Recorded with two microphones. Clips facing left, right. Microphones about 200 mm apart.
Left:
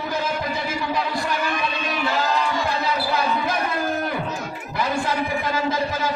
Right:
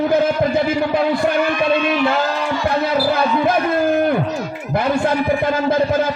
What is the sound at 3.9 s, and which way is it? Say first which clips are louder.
Music: right 9 dB; 55° right (ahead or behind).